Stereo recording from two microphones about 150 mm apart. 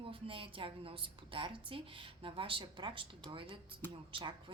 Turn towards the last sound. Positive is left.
turn(degrees=-35)  # may be behind; listen again after turning